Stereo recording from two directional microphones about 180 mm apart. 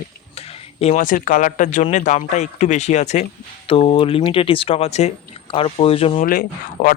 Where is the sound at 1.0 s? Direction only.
50° left (ahead or behind); by 6.2 s 35° left (ahead or behind).